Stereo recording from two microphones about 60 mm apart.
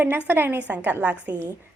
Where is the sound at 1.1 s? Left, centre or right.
Left.